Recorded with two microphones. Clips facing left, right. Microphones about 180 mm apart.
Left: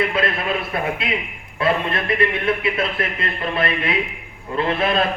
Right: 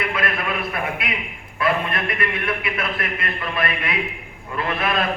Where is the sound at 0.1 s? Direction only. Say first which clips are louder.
Left 3 dB; 25° left (ahead or behind).